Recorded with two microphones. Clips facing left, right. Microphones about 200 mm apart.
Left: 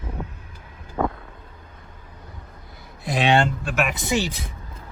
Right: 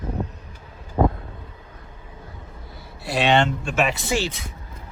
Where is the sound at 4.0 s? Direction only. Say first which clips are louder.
Left 1 dB; 15° left (ahead or behind).